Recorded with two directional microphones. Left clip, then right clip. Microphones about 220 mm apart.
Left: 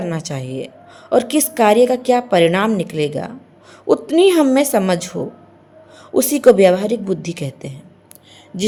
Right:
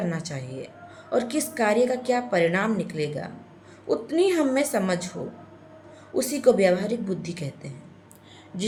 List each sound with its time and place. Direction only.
0.0 s a woman's voice: 40° left (ahead or behind)
6.1 s a woman's voice: 40° left (ahead or behind)